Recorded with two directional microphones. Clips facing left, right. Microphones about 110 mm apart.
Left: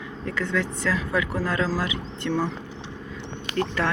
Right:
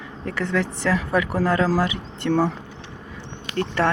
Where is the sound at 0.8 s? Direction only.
40° right (ahead or behind).